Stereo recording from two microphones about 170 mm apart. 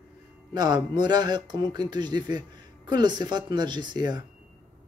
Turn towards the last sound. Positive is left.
turn(degrees=-25)  # may be behind; listen again after turning